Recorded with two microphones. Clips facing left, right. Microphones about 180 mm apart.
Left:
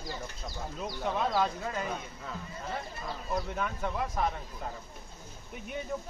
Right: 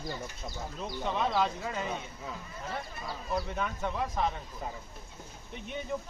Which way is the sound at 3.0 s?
Centre (ahead or behind).